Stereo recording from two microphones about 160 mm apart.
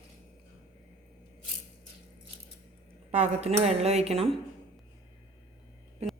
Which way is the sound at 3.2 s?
40° right (ahead or behind).